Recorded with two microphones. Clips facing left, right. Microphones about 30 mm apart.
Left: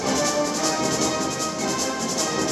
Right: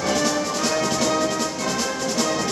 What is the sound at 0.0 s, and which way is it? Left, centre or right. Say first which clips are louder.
Music: right 1 dB; centre.